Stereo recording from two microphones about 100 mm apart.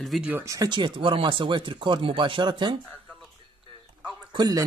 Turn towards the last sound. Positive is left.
turn(degrees=-45)  # may be behind; listen again after turning